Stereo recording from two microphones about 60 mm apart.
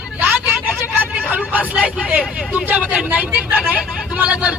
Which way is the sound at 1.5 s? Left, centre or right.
Right.